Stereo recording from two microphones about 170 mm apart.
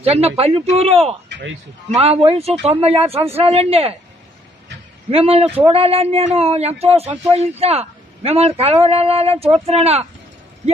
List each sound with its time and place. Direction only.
0.0 s speech: 35° right (ahead or behind)
5.1 s speech: 35° right (ahead or behind)